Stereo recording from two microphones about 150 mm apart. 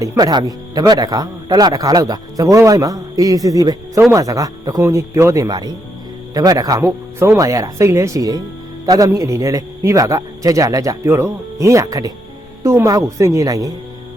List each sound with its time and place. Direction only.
0.0 s speech: 25° right (ahead or behind)